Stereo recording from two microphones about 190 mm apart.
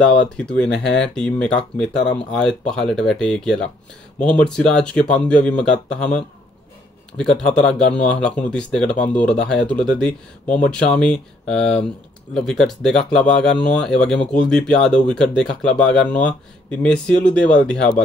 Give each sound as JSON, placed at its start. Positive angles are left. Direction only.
{"t": 0.0, "sound": "speech", "side_deg": 5}
{"t": 0.7, "sound": "speech", "side_deg": 65}
{"t": 1.0, "sound": "speech", "side_deg": 5}
{"t": 7.2, "sound": "speech", "side_deg": 5}